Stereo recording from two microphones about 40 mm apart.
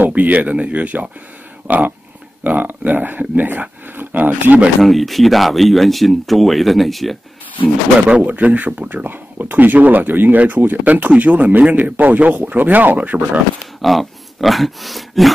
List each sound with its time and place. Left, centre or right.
0.0 s speech: right
2.4 s speech: right
4.8 s speech: centre
8.2 s speech: right
13.7 s speech: centre